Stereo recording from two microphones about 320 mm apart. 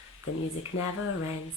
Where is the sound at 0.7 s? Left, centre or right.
Left.